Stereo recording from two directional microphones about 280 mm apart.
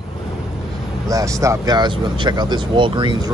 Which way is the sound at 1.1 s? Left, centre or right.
Centre.